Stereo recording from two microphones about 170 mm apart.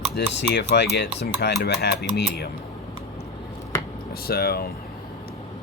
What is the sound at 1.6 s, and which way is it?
Speech, 70° left (ahead or behind).